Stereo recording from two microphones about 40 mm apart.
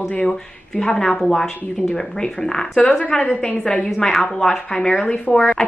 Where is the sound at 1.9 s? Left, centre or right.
Centre.